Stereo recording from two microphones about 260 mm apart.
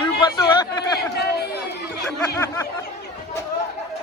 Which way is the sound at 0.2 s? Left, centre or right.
Centre.